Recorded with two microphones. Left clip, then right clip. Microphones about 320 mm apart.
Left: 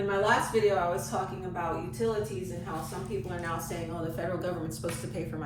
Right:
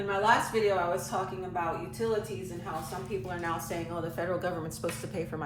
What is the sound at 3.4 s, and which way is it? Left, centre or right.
Speech, centre.